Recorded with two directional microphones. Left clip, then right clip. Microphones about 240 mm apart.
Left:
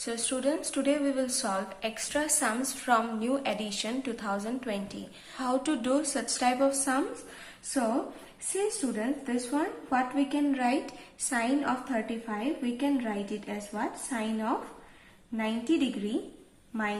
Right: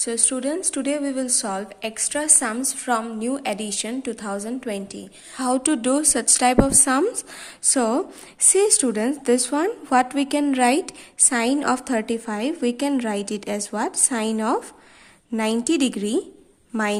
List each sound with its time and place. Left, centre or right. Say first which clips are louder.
0.0 s a woman's voice: right 6 dB; right